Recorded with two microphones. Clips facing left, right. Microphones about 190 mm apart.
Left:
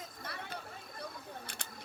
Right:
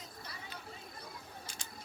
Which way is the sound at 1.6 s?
60° left (ahead or behind).